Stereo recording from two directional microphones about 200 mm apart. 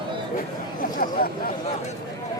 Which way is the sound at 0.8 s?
45° left (ahead or behind).